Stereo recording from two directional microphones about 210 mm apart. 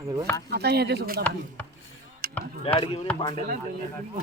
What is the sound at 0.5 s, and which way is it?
Speech, 50° right (ahead or behind).